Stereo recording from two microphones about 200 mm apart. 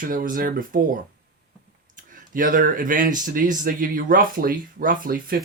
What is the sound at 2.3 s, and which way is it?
Speech, 45° right (ahead or behind).